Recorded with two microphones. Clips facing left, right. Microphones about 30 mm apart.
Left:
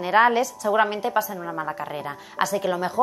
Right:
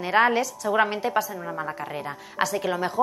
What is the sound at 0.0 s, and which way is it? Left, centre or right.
A woman's voice, centre.